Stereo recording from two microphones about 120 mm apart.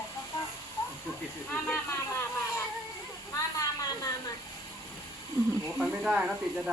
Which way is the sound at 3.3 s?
30° left (ahead or behind).